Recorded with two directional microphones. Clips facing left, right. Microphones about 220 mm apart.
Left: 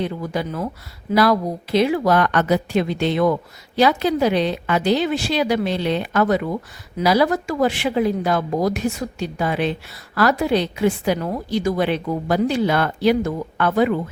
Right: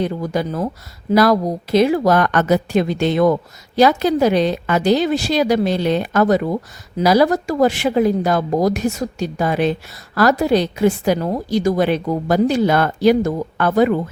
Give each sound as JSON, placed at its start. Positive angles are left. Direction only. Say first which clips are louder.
{"t": 0.0, "sound": "a woman's voice", "louder": "right 4 dB", "side_deg": -40}